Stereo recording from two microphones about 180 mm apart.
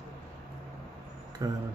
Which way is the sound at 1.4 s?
20° right (ahead or behind).